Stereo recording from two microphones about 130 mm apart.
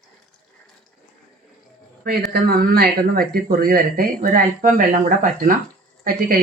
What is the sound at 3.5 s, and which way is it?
Speech, 90° right.